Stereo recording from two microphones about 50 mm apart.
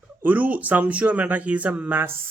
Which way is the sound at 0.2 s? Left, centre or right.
Right.